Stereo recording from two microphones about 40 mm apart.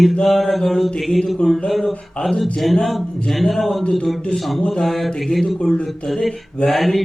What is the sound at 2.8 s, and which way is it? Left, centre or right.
Mantra, centre.